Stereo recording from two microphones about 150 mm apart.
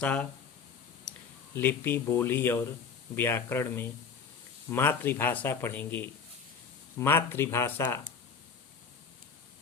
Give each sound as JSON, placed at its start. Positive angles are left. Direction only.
{"t": 0.0, "sound": "speech", "side_deg": 10}
{"t": 1.5, "sound": "speech", "side_deg": 15}